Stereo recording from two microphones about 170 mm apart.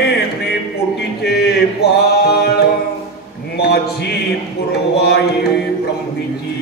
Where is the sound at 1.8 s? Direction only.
70° left (ahead or behind).